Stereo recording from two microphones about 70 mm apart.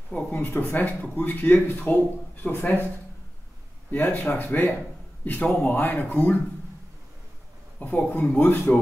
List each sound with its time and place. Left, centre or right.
0.3 s speech: left
3.9 s speech: left
7.8 s speech: left